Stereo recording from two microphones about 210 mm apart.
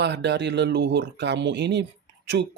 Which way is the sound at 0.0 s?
55° right (ahead or behind).